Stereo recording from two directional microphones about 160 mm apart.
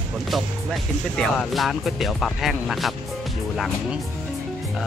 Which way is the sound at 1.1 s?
5° left (ahead or behind).